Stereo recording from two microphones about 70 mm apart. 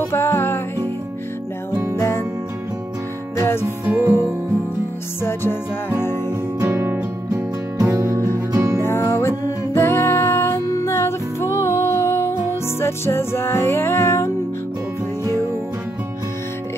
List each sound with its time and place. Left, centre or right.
0.1 s music: left
2.0 s music: left
3.3 s music: left
5.2 s music: left
6.6 s music: right
8.8 s music: left